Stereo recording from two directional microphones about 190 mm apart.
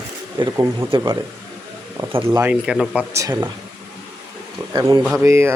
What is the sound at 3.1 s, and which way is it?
Speech, 15° right (ahead or behind).